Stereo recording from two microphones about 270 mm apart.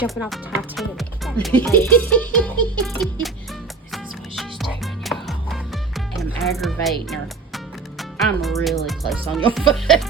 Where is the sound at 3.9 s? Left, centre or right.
Centre.